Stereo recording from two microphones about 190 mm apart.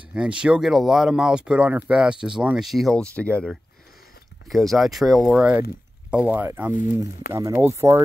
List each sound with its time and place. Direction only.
0.1 s speech: 5° right (ahead or behind)
6.7 s speech: 45° left (ahead or behind)
7.3 s speech: 15° right (ahead or behind)